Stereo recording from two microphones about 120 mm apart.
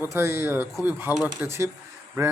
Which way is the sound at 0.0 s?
20° right (ahead or behind).